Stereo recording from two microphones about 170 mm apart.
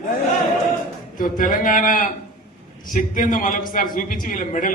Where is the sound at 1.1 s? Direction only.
55° left (ahead or behind).